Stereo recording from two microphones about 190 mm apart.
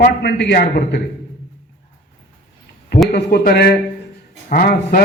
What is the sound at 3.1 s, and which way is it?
A man's voice, 55° left (ahead or behind).